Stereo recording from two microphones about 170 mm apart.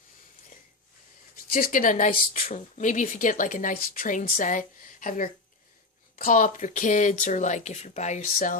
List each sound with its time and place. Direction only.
1.5 s speech: 55° left (ahead or behind)